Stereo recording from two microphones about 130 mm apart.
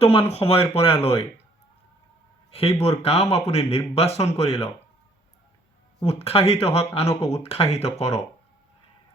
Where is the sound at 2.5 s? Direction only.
50° left (ahead or behind).